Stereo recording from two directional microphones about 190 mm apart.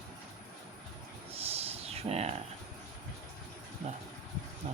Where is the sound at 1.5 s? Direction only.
35° right (ahead or behind).